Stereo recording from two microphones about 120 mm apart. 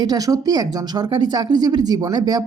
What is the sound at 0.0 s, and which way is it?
A woman's voice, 30° right (ahead or behind).